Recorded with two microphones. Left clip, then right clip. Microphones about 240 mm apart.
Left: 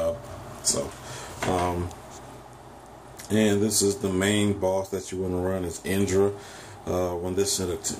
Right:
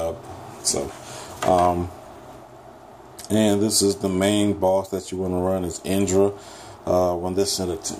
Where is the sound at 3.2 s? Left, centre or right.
Centre.